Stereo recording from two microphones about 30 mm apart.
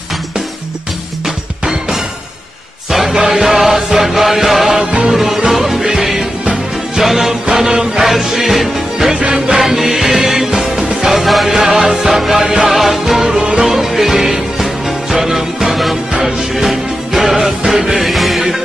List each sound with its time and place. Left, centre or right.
3.1 s music: centre
7.5 s music: right
8.0 s music: centre
11.2 s music: centre
11.5 s music: centre
17.9 s music: centre